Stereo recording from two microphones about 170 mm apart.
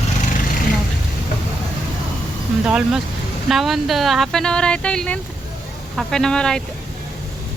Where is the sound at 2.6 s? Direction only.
5° right (ahead or behind).